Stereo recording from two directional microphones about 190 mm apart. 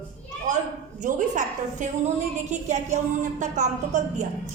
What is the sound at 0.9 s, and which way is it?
A woman's voice, 40° right (ahead or behind).